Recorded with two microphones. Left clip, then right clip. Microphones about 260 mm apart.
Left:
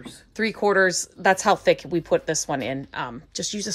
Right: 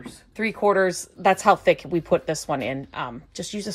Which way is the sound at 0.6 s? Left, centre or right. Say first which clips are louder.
Even; centre.